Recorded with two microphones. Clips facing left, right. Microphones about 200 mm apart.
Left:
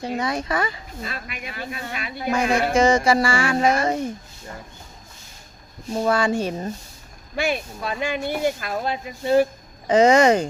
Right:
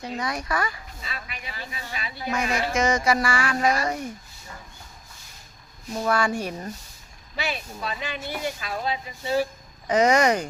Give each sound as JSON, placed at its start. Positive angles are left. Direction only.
{"t": 0.2, "sound": "music", "side_deg": 25}
{"t": 1.0, "sound": "speech", "side_deg": 50}
{"t": 2.7, "sound": "music", "side_deg": 30}
{"t": 5.9, "sound": "music", "side_deg": 30}
{"t": 7.3, "sound": "speech", "side_deg": 50}
{"t": 9.8, "sound": "music", "side_deg": 25}